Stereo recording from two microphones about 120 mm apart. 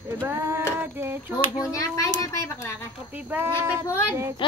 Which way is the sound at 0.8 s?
20° right (ahead or behind).